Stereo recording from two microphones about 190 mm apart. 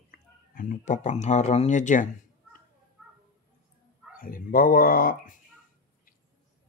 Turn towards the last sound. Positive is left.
turn(degrees=45)  # may be behind; listen again after turning